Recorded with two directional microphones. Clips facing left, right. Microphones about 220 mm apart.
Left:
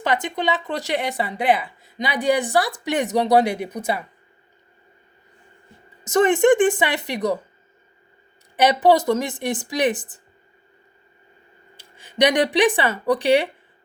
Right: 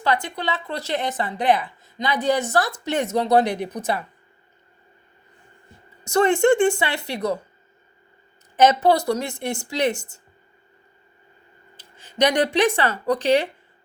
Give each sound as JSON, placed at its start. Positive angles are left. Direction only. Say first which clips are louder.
{"t": 0.0, "sound": "speech", "louder": "left 2 dB", "side_deg": 20}
{"t": 6.1, "sound": "speech", "louder": "left 2 dB", "side_deg": 20}
{"t": 8.5, "sound": "speech", "louder": "left 1 dB", "side_deg": 15}
{"t": 11.8, "sound": "speech", "louder": "left 2 dB", "side_deg": 15}